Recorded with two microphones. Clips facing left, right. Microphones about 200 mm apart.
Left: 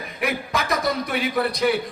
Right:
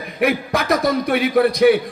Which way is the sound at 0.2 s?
55° right (ahead or behind).